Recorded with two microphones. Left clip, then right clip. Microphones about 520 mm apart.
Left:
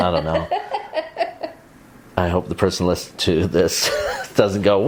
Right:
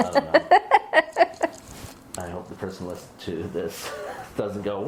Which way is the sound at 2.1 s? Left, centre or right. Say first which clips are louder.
Left 14 dB; left.